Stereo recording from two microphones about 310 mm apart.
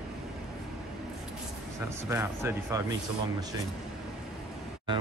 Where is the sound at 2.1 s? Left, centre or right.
Centre.